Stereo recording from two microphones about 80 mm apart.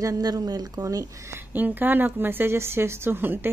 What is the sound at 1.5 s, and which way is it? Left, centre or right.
Speech, right.